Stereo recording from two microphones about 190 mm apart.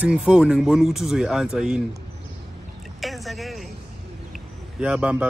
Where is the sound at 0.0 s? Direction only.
5° right (ahead or behind).